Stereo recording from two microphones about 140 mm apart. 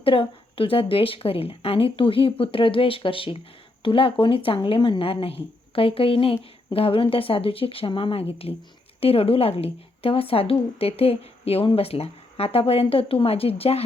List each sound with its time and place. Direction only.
0.0 s a woman's voice: 40° left (ahead or behind)